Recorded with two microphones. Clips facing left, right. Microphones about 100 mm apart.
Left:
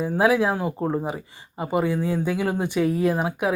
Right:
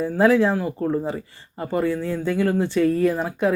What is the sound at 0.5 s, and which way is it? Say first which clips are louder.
Speech: right 2 dB; 20° left (ahead or behind).